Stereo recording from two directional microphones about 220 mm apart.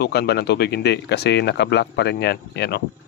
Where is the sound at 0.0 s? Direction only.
50° left (ahead or behind).